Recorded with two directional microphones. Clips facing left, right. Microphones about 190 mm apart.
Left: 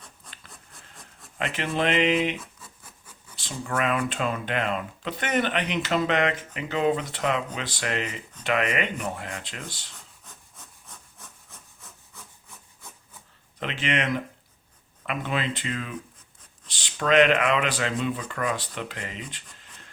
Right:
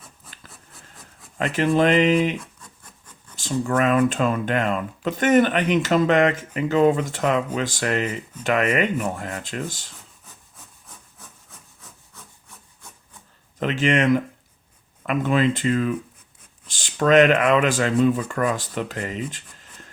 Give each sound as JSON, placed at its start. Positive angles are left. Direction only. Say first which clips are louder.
{"t": 0.3, "sound": "printer", "louder": "right 1 dB", "side_deg": -5}
{"t": 0.7, "sound": "wood", "louder": "right 2 dB", "side_deg": 0}
{"t": 1.5, "sound": "speech", "louder": "right 7 dB", "side_deg": -45}
{"t": 2.4, "sound": "a sound", "louder": "right 2 dB", "side_deg": 5}
{"t": 3.3, "sound": "speech", "louder": "right 8 dB", "side_deg": -45}
{"t": 11.8, "sound": "wood", "louder": "right 1 dB", "side_deg": 0}
{"t": 13.6, "sound": "speech", "louder": "right 8 dB", "side_deg": -45}